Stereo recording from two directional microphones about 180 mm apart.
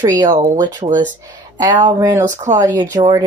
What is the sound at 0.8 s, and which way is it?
A woman's voice, 30° right (ahead or behind).